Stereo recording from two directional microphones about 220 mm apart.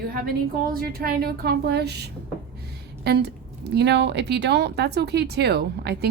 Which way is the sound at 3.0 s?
50° right (ahead or behind).